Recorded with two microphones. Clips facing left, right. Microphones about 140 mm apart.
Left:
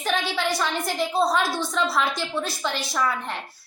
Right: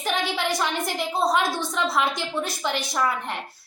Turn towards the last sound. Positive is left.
turn(degrees=-15)  # may be behind; listen again after turning